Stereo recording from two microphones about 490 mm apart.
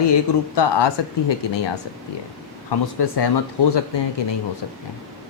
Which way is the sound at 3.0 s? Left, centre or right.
Left.